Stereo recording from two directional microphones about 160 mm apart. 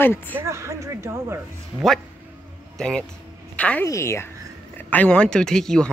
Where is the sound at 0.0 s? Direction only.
15° left (ahead or behind).